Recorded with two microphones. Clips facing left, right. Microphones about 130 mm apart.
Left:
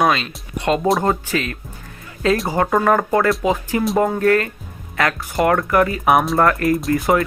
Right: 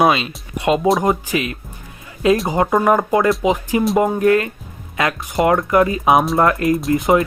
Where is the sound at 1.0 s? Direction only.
15° right (ahead or behind).